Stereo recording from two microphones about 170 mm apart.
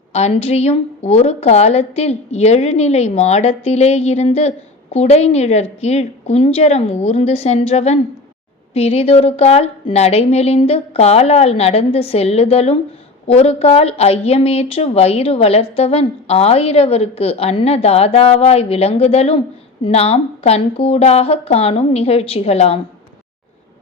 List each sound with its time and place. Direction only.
0.1 s speech: 40° left (ahead or behind)